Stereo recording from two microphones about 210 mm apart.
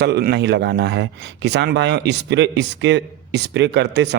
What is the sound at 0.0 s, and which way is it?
Speech, 50° right (ahead or behind).